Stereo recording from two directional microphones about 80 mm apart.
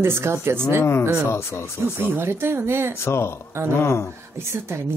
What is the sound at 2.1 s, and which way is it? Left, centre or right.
Speech, right.